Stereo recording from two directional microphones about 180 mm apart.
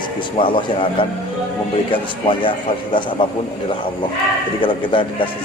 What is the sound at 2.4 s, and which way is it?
Speech, 25° left (ahead or behind).